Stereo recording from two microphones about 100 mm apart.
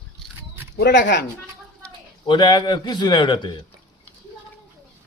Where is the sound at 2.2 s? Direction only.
50° left (ahead or behind).